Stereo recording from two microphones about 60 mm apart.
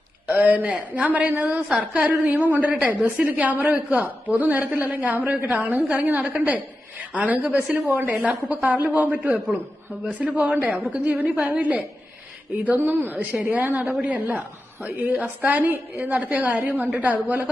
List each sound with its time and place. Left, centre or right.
0.3 s a woman's voice: right